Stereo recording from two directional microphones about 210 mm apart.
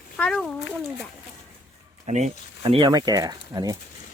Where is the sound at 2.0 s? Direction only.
35° right (ahead or behind); by 3.7 s 15° right (ahead or behind).